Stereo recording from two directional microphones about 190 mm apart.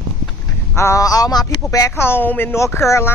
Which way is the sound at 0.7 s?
15° left (ahead or behind).